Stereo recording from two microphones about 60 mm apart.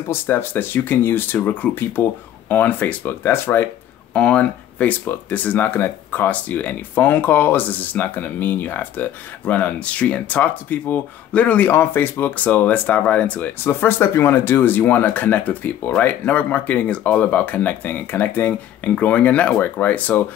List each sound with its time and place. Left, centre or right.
0.1 s speech: left
3.3 s speech: left
4.1 s speech: left
13.7 s speech: left